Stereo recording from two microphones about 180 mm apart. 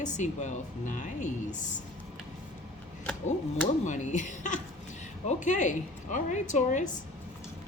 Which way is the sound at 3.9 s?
45° left (ahead or behind).